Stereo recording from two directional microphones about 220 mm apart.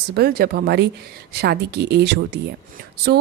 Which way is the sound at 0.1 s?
45° right (ahead or behind).